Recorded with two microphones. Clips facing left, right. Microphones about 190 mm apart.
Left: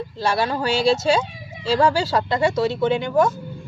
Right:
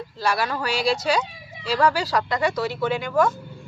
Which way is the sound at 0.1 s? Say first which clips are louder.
Left 2 dB; 25° left (ahead or behind).